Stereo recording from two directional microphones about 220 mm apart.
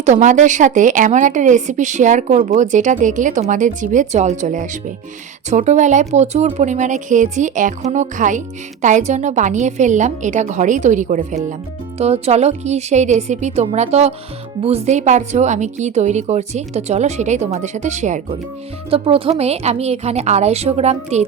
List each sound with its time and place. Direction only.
0.0 s a woman's voice: 35° right (ahead or behind)